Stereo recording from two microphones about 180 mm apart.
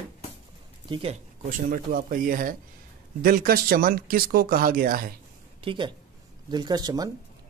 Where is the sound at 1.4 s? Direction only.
50° right (ahead or behind).